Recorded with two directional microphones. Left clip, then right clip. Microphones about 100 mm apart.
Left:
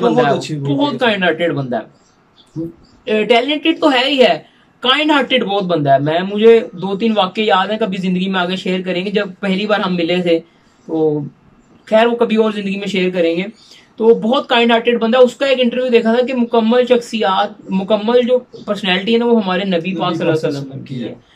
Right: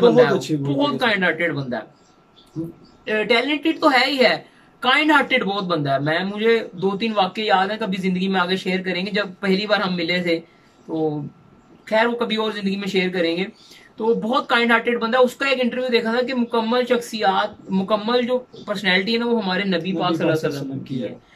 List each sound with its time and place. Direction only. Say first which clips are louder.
0.0 s a woman's voice: left 1 dB; 10° left (ahead or behind)
3.1 s a woman's voice: left 6 dB; 10° left (ahead or behind)
10.9 s speech: left 7 dB; centre (ahead or behind)
11.8 s a woman's voice: left 7 dB; 15° left (ahead or behind)